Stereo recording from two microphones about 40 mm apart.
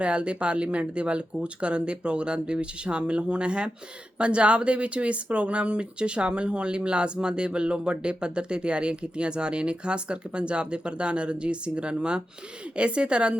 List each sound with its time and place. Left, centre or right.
0.0 s speech: right